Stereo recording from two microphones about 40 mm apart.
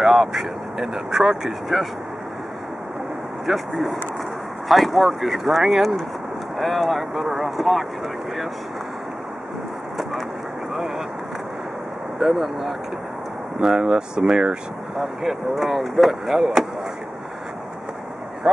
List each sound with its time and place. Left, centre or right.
0.0 s speech: centre
3.4 s speech: centre
12.2 s speech: centre
13.7 s speech: centre
15.0 s speech: centre